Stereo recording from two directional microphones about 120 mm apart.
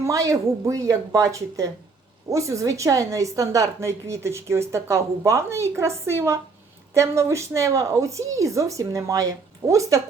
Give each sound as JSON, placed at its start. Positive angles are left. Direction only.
{"t": 0.0, "sound": "a woman's voice", "side_deg": -25}